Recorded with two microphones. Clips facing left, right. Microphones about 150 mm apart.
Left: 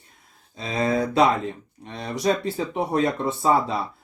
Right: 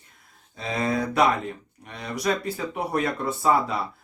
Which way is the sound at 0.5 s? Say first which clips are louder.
Left 3 dB; 25° left (ahead or behind).